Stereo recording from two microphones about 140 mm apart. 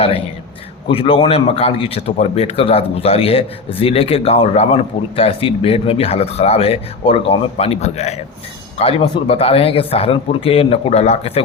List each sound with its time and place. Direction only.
0.9 s speech: 40° left (ahead or behind)
8.8 s speech: 40° left (ahead or behind)